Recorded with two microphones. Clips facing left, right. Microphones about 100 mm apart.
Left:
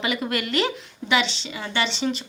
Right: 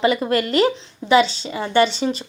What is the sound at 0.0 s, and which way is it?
A woman's voice, 35° right (ahead or behind).